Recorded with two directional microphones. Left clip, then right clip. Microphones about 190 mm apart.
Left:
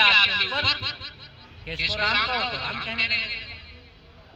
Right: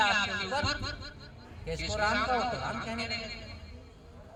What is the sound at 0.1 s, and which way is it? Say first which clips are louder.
Snicker: left 10 dB; 35° right (ahead or behind).